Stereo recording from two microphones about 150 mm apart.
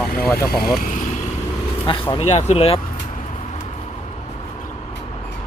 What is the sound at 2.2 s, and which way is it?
Speech, 45° left (ahead or behind).